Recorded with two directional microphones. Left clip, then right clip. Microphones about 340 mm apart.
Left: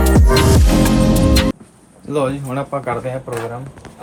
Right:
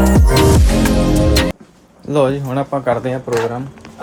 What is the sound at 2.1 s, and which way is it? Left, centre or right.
Speech, centre.